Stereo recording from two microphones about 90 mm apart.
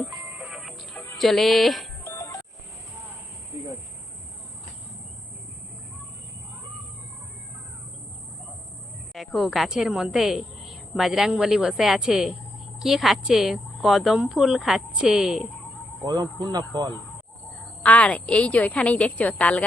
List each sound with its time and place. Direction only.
0.4 s music: centre (ahead or behind)
1.2 s speech: centre (ahead or behind)
2.0 s music: 35° left (ahead or behind)
9.1 s a woman's voice: centre (ahead or behind)
16.0 s speech: 55° right (ahead or behind)
17.8 s a woman's voice: 15° left (ahead or behind)